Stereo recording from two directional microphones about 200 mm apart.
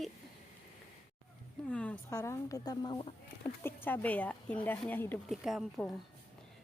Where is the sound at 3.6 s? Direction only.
10° left (ahead or behind).